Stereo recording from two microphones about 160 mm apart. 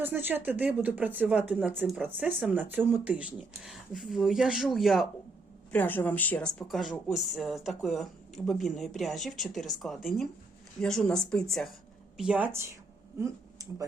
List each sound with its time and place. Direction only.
0.0 s speech: 10° right (ahead or behind)
5.7 s a woman's voice: 10° left (ahead or behind); by 12.5 s 5° right (ahead or behind)
13.1 s speech: 20° right (ahead or behind)